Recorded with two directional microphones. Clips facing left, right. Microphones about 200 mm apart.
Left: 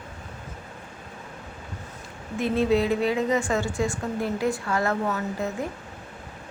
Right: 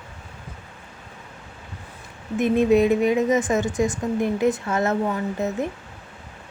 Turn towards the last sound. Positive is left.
turn(degrees=-20)  # may be behind; listen again after turning